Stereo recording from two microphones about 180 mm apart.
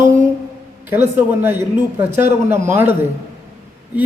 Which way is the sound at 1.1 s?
10° right (ahead or behind).